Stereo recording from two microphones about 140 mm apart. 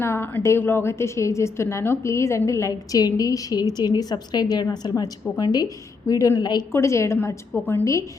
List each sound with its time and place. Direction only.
0.0 s a woman's voice: 15° left (ahead or behind)